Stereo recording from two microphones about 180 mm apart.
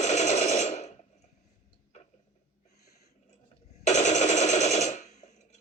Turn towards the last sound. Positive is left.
turn(degrees=40)  # may be behind; listen again after turning